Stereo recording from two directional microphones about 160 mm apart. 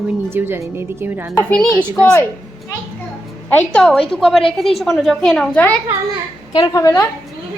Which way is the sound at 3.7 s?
Centre (ahead or behind).